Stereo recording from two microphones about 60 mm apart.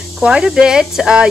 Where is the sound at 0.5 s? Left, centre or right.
Centre.